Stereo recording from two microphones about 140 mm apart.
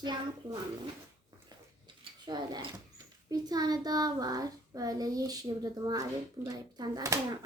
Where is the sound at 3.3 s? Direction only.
30° right (ahead or behind).